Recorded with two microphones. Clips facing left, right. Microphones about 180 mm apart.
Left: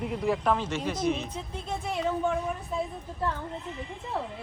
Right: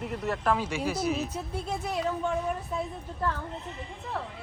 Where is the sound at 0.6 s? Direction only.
10° right (ahead or behind).